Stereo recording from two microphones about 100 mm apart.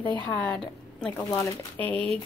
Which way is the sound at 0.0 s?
50° left (ahead or behind).